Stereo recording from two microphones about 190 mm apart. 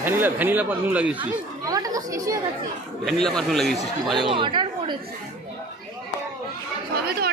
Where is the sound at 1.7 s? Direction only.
20° right (ahead or behind).